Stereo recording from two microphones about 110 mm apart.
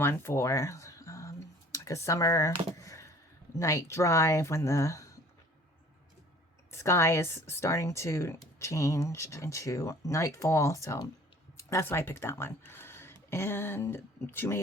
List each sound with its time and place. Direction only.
0.0 s a sound: 20° left (ahead or behind)
3.6 s speech: 30° left (ahead or behind)
6.7 s speech: 25° left (ahead or behind)